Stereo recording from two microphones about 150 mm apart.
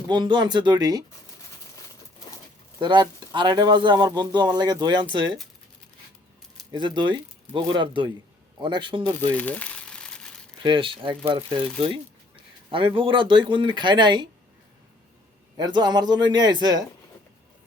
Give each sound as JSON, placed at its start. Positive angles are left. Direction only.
{"t": 0.1, "sound": "speech", "side_deg": -30}
{"t": 2.7, "sound": "speech", "side_deg": -30}
{"t": 6.7, "sound": "speech", "side_deg": -30}
{"t": 9.3, "sound": "crumpling", "side_deg": 10}
{"t": 10.6, "sound": "speech", "side_deg": -35}
{"t": 15.5, "sound": "speech", "side_deg": -25}